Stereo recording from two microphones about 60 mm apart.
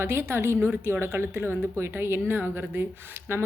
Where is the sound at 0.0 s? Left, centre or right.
Right.